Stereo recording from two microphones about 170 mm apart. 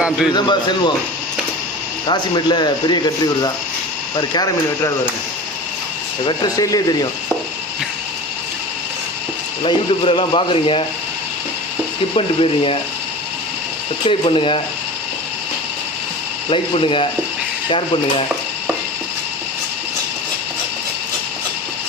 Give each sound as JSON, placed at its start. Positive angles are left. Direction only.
{"t": 0.3, "sound": "speech", "side_deg": 25}
{"t": 2.0, "sound": "speech", "side_deg": 25}
{"t": 6.2, "sound": "speech", "side_deg": 20}
{"t": 9.6, "sound": "speech", "side_deg": 30}
{"t": 12.1, "sound": "speech", "side_deg": 35}
{"t": 14.0, "sound": "speech", "side_deg": 30}
{"t": 16.5, "sound": "speech", "side_deg": 30}